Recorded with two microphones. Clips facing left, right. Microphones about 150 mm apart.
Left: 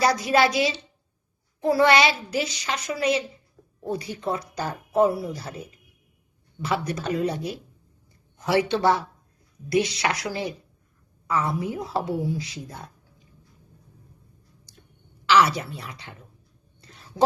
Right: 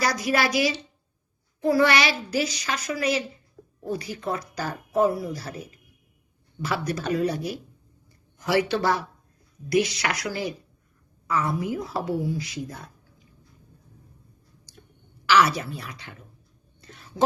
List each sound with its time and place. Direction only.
0.0 s speech: 25° left (ahead or behind)
6.7 s speech: 30° left (ahead or behind)
15.3 s speech: 30° left (ahead or behind)
16.8 s a sound: 30° left (ahead or behind)